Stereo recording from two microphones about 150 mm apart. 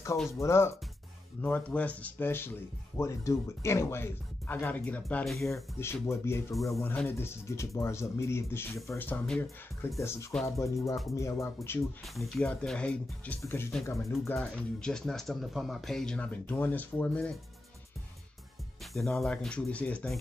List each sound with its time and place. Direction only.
0.3 s speech: 20° left (ahead or behind); by 5.5 s centre (ahead or behind)
5.5 s speech: 20° left (ahead or behind)
12.0 s speech: centre (ahead or behind); by 14.3 s 20° left (ahead or behind)
14.3 s speech: 5° left (ahead or behind)
18.9 s speech: centre (ahead or behind)